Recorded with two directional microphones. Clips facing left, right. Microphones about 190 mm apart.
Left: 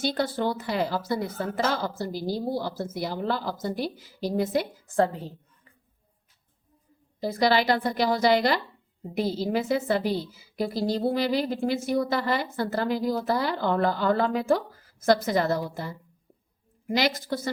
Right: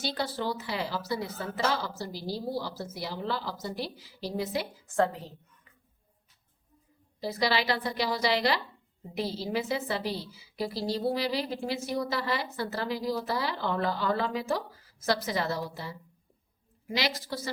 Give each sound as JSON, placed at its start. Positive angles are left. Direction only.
{"t": 0.0, "sound": "a woman's voice", "side_deg": 50}
{"t": 4.9, "sound": "a woman's voice", "side_deg": 30}
{"t": 7.2, "sound": "a woman's voice", "side_deg": 50}